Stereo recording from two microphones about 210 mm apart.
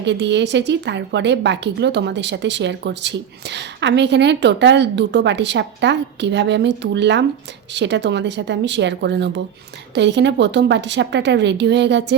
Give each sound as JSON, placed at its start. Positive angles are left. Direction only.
{"t": 0.0, "sound": "a woman's voice", "side_deg": -55}